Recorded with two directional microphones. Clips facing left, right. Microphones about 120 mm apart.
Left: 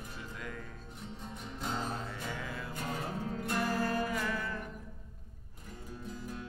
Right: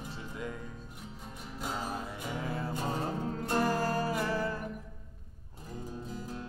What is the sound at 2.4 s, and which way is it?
Music, 35° right (ahead or behind).